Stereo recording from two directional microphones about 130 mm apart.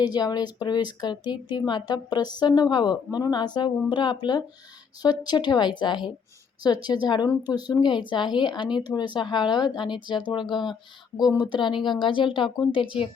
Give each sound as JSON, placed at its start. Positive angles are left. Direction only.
{"t": 0.0, "sound": "a woman's voice", "side_deg": 30}
{"t": 11.9, "sound": "a woman's voice", "side_deg": 40}